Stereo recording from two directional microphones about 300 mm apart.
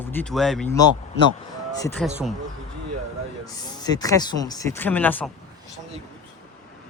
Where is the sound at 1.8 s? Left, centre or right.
Centre.